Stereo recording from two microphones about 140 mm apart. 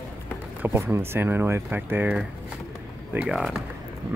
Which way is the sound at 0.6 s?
20° right (ahead or behind).